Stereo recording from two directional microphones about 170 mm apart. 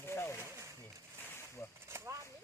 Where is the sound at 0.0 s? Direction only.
15° left (ahead or behind).